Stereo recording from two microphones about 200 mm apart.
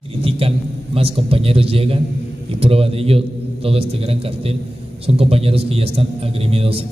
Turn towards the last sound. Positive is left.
turn(degrees=-30)  # may be behind; listen again after turning